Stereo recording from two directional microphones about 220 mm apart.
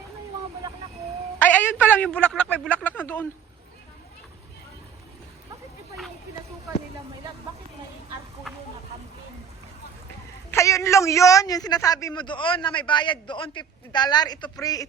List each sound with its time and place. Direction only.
1.4 s a man's voice: 5° left (ahead or behind)
10.5 s a woman's voice: 15° left (ahead or behind)